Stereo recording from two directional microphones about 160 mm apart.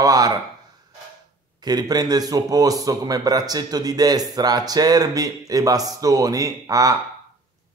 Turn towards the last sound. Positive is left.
turn(degrees=-20)  # may be behind; listen again after turning